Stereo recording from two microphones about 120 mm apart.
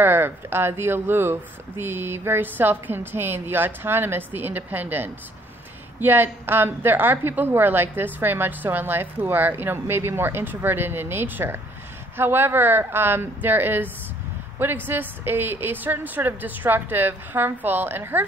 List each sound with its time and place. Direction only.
0.0 s a woman's voice: 20° right (ahead or behind)